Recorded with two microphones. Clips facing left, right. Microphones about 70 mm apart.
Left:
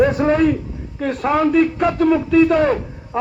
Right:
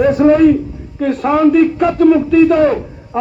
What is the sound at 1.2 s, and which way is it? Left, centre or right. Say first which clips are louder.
Speech: right 5 dB; centre.